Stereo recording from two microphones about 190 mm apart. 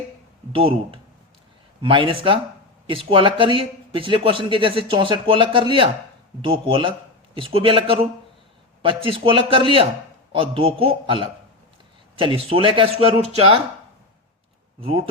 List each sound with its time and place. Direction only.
0.5 s speech: 30° right (ahead or behind)
14.8 s speech: 30° right (ahead or behind)